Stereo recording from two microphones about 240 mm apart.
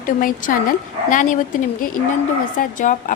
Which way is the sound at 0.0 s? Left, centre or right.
Left.